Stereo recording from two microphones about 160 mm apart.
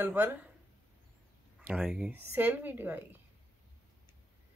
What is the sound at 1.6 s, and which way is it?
Speech, 10° right (ahead or behind).